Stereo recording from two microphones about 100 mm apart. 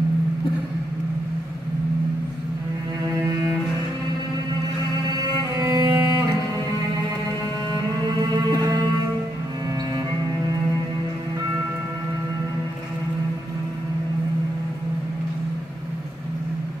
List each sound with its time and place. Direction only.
3.1 s cello: 40° right (ahead or behind)
5.6 s music: 40° right (ahead or behind)
8.2 s music: 40° right (ahead or behind)